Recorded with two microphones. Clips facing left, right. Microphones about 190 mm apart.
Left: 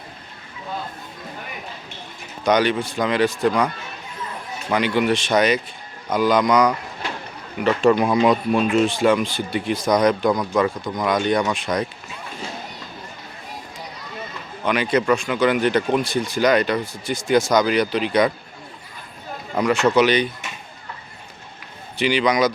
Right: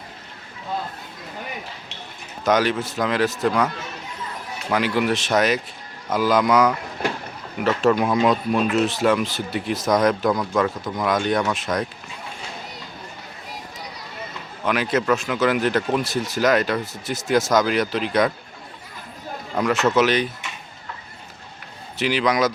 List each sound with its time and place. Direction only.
2.4 s speech: centre (ahead or behind)
4.7 s speech: centre (ahead or behind)
14.6 s speech: centre (ahead or behind)
19.5 s speech: centre (ahead or behind)
21.9 s speech: centre (ahead or behind)